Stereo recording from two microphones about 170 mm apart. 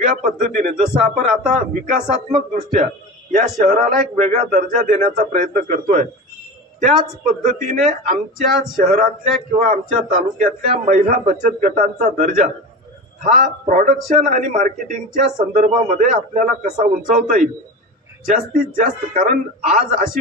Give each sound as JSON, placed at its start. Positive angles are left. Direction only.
{"t": 0.0, "sound": "a man's voice", "side_deg": -50}
{"t": 7.4, "sound": "a man's voice", "side_deg": -45}